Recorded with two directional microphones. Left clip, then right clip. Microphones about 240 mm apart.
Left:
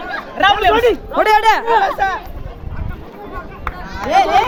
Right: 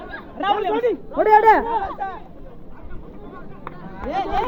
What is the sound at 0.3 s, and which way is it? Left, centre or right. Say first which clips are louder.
Speech: left 9 dB; left.